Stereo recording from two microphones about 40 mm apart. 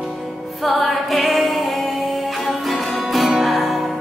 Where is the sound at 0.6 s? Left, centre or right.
Centre.